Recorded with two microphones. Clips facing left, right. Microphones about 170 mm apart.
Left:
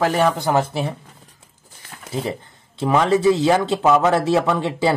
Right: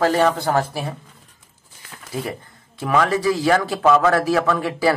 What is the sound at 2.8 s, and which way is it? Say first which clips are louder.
Speech: left 3 dB; 25° left (ahead or behind).